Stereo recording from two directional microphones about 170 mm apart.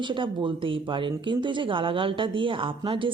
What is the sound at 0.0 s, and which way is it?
A woman's voice, 30° right (ahead or behind).